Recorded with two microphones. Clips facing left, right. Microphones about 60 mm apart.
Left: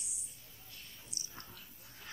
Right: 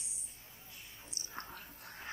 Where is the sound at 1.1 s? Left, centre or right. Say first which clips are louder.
Right 7 dB; right.